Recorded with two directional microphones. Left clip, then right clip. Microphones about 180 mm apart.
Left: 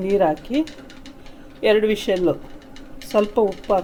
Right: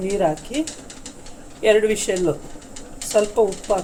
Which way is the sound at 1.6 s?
55° left (ahead or behind).